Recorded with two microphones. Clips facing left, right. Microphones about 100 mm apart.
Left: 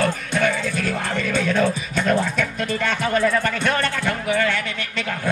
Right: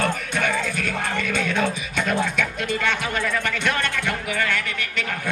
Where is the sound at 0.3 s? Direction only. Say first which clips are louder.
Left 3 dB; 35° left (ahead or behind).